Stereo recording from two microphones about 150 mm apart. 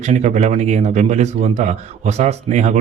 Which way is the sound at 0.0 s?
50° right (ahead or behind).